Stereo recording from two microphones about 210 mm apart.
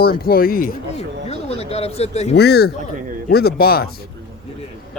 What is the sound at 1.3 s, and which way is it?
Speech, 30° left (ahead or behind).